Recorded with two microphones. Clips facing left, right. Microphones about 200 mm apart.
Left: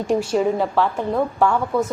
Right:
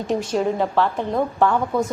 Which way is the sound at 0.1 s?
10° left (ahead or behind).